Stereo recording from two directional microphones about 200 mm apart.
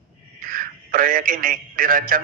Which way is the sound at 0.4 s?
45° right (ahead or behind).